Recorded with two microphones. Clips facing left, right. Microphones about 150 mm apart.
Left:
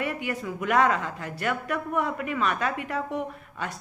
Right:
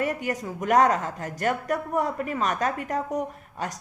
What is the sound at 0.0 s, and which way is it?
A woman's voice, 40° right (ahead or behind).